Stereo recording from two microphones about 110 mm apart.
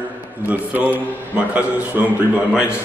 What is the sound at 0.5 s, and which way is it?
A man's voice, 15° right (ahead or behind).